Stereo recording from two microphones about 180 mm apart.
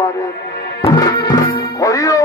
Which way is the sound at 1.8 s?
15° left (ahead or behind).